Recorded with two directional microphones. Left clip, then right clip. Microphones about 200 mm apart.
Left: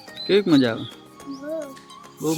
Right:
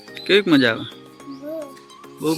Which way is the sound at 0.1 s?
5° left (ahead or behind).